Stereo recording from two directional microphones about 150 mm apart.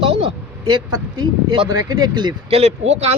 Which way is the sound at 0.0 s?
40° right (ahead or behind).